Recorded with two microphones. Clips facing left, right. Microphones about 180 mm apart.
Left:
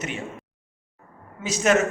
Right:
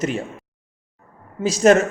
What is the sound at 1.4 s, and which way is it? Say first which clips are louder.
Speech: right 7 dB; 35° right (ahead or behind).